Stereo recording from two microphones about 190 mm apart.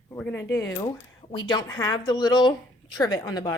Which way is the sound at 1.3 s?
25° left (ahead or behind).